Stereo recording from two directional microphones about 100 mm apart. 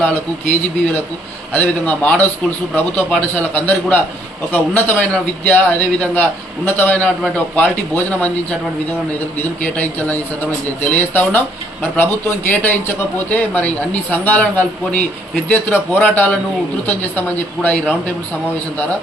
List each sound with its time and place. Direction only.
0.0 s speech: 20° left (ahead or behind)
1.5 s speech: 15° left (ahead or behind)
9.7 s speech: 15° left (ahead or behind)